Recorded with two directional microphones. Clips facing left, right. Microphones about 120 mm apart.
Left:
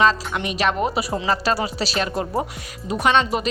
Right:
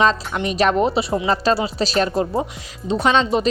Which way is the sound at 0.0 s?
30° right (ahead or behind).